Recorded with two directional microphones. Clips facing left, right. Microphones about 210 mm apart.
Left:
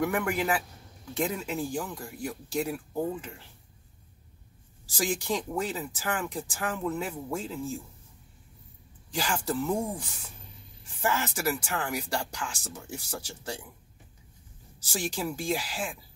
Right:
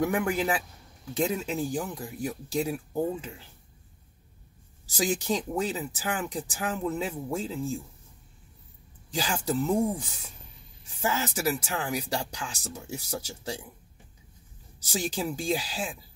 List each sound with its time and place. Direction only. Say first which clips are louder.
0.0 s speech: right 2 dB; 25° right (ahead or behind)
4.8 s speech: right 2 dB; 20° right (ahead or behind)
9.1 s speech: right 1 dB; 20° right (ahead or behind)
14.9 s speech: right 2 dB; 20° right (ahead or behind)